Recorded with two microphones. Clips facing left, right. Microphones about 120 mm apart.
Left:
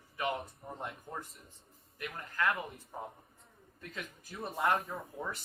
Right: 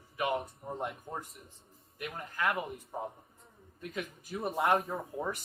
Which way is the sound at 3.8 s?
20° right (ahead or behind).